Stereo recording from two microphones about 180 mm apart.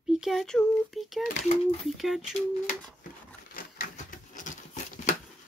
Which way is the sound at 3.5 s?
50° left (ahead or behind).